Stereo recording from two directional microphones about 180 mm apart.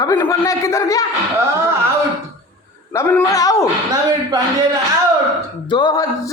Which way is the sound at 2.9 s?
15° left (ahead or behind).